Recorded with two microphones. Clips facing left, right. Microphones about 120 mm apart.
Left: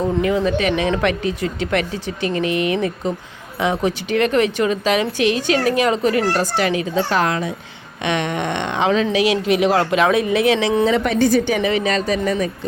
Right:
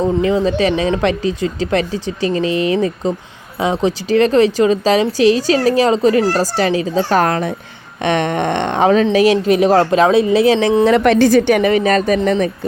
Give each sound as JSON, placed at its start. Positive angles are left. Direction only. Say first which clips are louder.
{"t": 0.0, "sound": "a woman's voice", "louder": "right 3 dB", "side_deg": -25}
{"t": 10.8, "sound": "a woman's voice", "louder": "right 5 dB", "side_deg": -70}
{"t": 11.7, "sound": "speech", "louder": "right 5 dB", "side_deg": -45}